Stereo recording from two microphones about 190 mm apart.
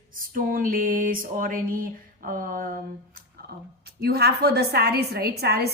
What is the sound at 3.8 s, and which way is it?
A woman's voice, 55° right (ahead or behind).